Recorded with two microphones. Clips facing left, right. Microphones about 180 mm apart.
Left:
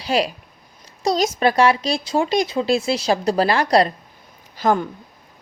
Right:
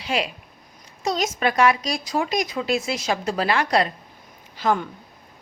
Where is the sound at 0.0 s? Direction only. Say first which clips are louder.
Left 5 dB; 35° left (ahead or behind).